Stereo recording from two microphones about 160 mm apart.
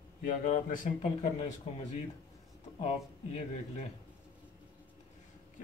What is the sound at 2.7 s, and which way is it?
Speech, 40° left (ahead or behind).